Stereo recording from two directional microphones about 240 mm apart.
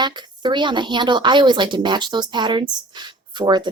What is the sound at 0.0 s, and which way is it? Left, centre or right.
A woman's voice, centre.